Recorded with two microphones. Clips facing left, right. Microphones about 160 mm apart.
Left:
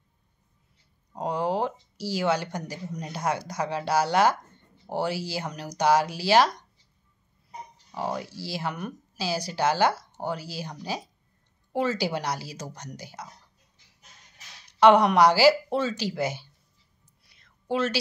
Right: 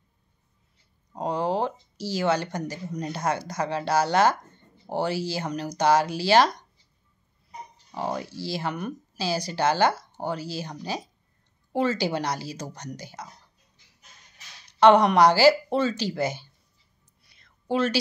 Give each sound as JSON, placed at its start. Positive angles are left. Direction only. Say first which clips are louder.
{"t": 1.1, "sound": "speech", "louder": "right 1 dB", "side_deg": 5}
{"t": 7.9, "sound": "speech", "louder": "right 1 dB", "side_deg": 5}
{"t": 14.8, "sound": "speech", "louder": "right 1 dB", "side_deg": 5}
{"t": 17.3, "sound": "a sound", "louder": "right 2 dB", "side_deg": 0}